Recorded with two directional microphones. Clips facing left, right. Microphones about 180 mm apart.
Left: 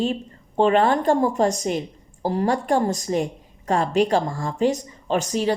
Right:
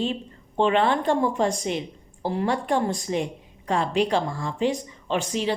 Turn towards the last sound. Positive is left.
turn(degrees=45)  # may be behind; listen again after turning